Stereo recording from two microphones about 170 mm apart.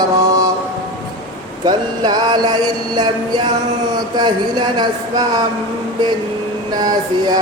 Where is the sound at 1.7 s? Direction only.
25° right (ahead or behind).